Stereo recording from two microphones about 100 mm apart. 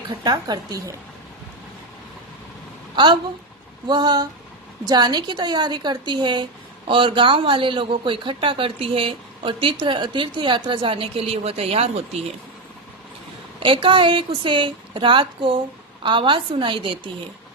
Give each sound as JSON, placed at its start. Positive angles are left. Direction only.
{"t": 0.3, "sound": "speech", "side_deg": -45}
{"t": 2.9, "sound": "a woman's voice", "side_deg": -45}
{"t": 13.6, "sound": "a woman's voice", "side_deg": -60}